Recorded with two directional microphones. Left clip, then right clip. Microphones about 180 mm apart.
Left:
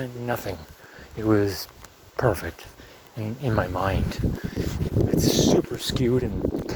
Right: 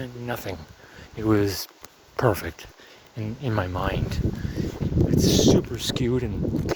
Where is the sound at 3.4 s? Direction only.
20° right (ahead or behind).